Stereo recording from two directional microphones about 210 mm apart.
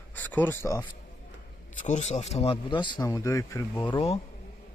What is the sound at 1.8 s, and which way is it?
A man's voice, 35° left (ahead or behind).